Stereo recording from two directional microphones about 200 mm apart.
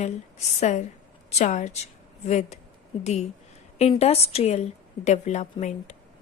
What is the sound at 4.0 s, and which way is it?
A woman's voice, 30° left (ahead or behind).